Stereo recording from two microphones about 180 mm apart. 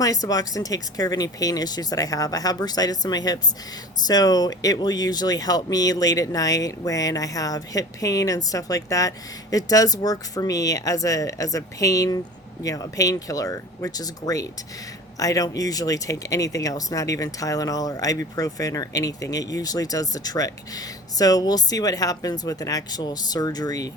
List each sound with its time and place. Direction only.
0.0 s speech: 20° left (ahead or behind)